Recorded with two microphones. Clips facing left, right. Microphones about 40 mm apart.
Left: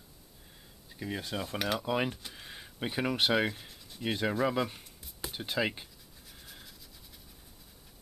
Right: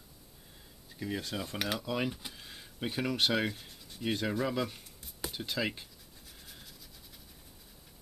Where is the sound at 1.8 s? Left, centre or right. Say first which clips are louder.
Left 3 dB; centre.